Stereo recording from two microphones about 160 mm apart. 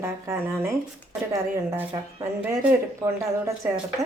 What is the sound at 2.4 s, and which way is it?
Speech, 15° right (ahead or behind).